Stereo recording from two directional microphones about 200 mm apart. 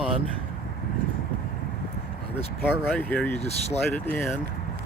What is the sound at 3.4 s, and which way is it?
Speech, 30° left (ahead or behind).